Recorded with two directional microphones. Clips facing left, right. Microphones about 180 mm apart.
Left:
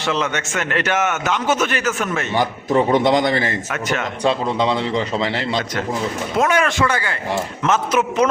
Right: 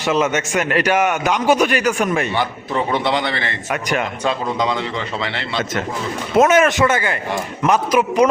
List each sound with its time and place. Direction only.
0.0 s a man's voice: 15° right (ahead or behind)
3.0 s a man's voice: 45° left (ahead or behind)
3.7 s a man's voice: 15° right (ahead or behind)
4.2 s a man's voice: 30° left (ahead or behind)
6.3 s a man's voice: 20° right (ahead or behind)